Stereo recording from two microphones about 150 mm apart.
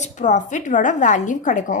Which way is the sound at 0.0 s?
55° left (ahead or behind).